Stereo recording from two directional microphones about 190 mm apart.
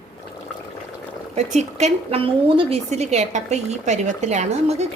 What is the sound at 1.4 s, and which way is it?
Speech, 35° right (ahead or behind).